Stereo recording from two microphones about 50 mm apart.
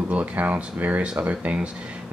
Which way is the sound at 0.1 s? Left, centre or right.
Right.